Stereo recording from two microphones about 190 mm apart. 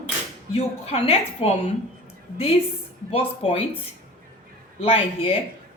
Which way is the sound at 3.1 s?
30° left (ahead or behind).